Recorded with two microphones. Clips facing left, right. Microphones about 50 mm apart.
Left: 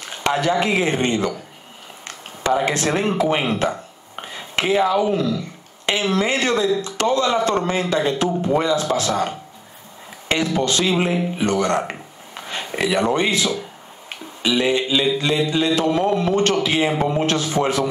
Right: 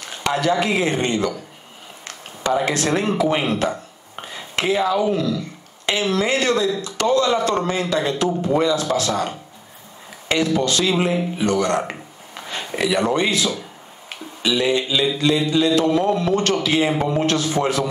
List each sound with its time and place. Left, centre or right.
0.2 s speech: left
2.4 s speech: centre
14.0 s a sound: left
15.5 s speech: left